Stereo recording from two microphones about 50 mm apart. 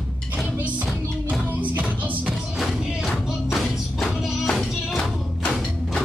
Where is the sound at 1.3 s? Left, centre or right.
Right.